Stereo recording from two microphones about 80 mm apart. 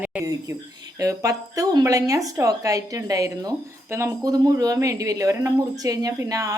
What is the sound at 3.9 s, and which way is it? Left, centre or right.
Speech, right.